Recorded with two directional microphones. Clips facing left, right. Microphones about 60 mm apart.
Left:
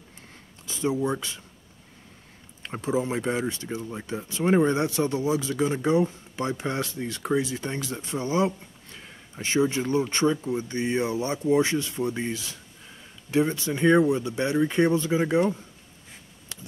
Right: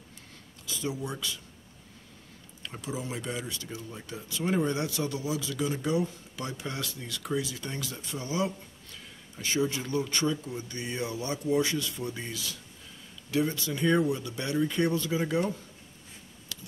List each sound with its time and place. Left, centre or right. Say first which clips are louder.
0.7 s speech: left 8 dB; left
2.6 s speech: left 10 dB; left